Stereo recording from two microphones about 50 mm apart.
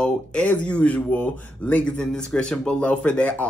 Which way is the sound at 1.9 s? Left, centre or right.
Centre.